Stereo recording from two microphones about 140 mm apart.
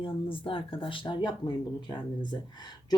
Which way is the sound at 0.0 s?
40° left (ahead or behind).